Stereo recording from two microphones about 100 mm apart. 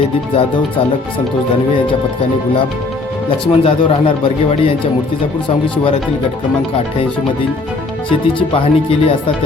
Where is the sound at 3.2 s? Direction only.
65° left (ahead or behind).